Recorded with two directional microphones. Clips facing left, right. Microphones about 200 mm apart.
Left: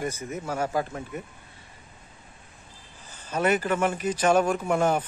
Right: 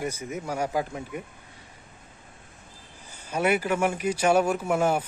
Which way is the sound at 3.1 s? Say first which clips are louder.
Even; 10° right (ahead or behind).